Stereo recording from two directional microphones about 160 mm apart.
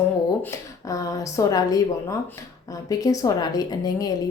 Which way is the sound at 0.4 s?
20° left (ahead or behind).